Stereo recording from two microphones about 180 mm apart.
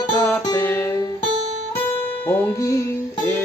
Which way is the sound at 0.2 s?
15° left (ahead or behind).